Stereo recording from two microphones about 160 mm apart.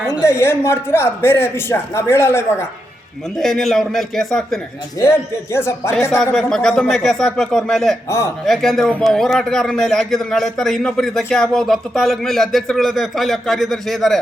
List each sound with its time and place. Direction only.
0.2 s a man's voice: 15° left (ahead or behind)
3.3 s a man's voice: centre (ahead or behind)
4.9 s a man's voice: 15° left (ahead or behind)
6.3 s a man's voice: 5° left (ahead or behind)